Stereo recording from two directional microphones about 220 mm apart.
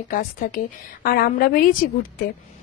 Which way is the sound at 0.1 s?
35° left (ahead or behind).